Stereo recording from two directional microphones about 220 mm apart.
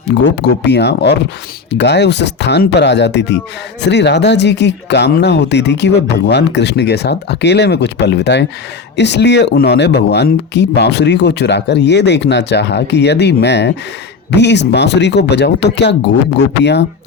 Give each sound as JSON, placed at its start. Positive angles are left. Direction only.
{"t": 0.1, "sound": "speech", "side_deg": 50}